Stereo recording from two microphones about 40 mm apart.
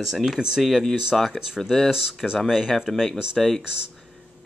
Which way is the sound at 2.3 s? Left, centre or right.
Centre.